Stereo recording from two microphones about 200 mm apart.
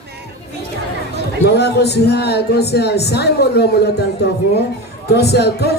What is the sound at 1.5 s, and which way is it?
Speech, 55° left (ahead or behind).